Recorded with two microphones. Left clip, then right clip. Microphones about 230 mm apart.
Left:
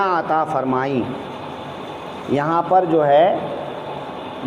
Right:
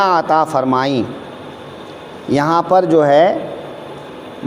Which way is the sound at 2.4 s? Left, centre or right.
Right.